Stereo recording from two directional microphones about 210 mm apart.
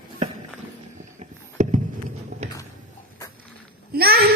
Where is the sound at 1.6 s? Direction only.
35° right (ahead or behind).